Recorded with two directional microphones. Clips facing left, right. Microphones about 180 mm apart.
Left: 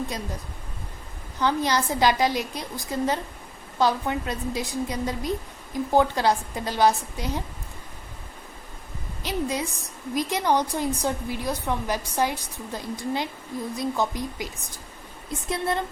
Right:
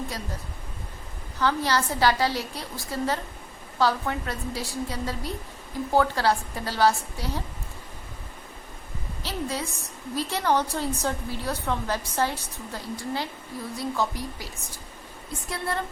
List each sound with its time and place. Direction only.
1.4 s a woman's voice: 20° left (ahead or behind)
9.2 s a woman's voice: 15° left (ahead or behind)